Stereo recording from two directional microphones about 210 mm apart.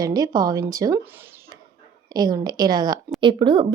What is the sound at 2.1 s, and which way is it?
A woman's voice, 20° right (ahead or behind).